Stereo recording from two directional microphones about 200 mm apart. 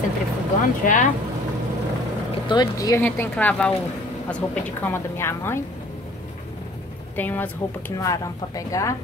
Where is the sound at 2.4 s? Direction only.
20° left (ahead or behind).